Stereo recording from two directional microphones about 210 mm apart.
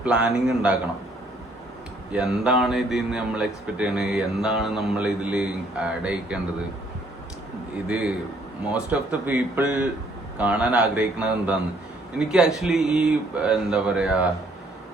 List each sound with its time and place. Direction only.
0.0 s speech: 5° right (ahead or behind)
2.1 s speech: 5° right (ahead or behind)
7.9 s a man's voice: 5° right (ahead or behind)